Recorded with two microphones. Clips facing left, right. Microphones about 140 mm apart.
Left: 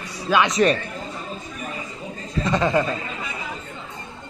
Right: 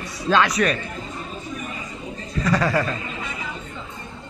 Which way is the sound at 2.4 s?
20° left (ahead or behind).